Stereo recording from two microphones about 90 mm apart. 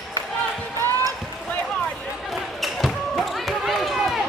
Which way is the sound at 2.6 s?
Centre (ahead or behind).